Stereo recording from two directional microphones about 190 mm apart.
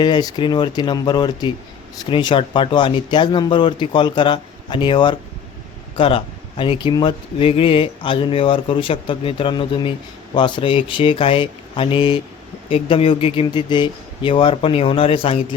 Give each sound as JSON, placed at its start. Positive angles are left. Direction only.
{"t": 0.0, "sound": "speech", "side_deg": 20}